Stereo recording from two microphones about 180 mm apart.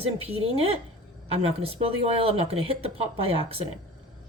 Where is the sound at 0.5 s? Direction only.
30° right (ahead or behind).